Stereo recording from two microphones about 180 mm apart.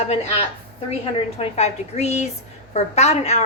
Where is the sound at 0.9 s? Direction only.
35° left (ahead or behind).